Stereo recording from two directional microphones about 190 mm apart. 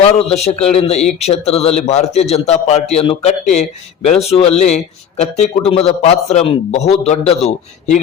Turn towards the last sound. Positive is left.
turn(degrees=35)  # may be behind; listen again after turning